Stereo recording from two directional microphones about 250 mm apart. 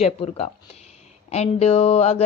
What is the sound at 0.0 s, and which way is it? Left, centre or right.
Speech, left.